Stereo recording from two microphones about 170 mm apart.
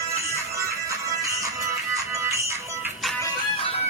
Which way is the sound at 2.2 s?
15° right (ahead or behind).